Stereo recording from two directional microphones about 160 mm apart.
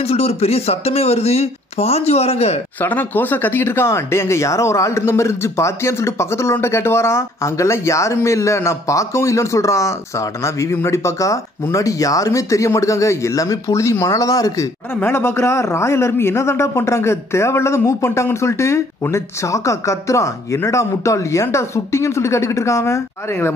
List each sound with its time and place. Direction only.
0.0 s speech: 40° left (ahead or behind)
2.8 s speech: 10° left (ahead or behind)